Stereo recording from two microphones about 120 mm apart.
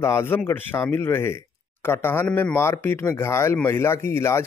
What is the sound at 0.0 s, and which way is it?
Speech, 20° left (ahead or behind).